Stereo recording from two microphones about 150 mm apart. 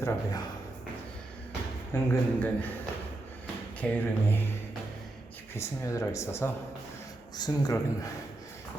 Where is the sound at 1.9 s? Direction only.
15° left (ahead or behind).